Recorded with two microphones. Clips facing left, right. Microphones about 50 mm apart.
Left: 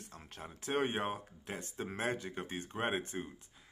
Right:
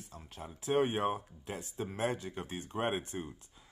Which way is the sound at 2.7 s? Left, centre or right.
Left.